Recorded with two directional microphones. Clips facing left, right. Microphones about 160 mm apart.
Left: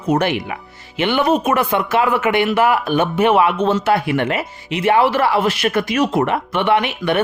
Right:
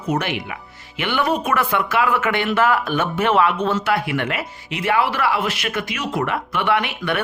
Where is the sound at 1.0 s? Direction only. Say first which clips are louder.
Left 5 dB; 20° left (ahead or behind); by 6.1 s 40° left (ahead or behind).